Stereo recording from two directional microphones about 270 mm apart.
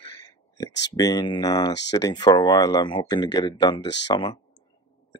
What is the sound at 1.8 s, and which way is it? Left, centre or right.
Speech, centre.